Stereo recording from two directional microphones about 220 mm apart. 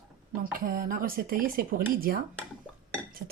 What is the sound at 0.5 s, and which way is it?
Speech, 40° right (ahead or behind).